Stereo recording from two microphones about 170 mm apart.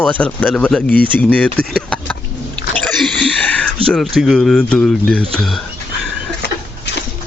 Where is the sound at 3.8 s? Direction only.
Centre (ahead or behind).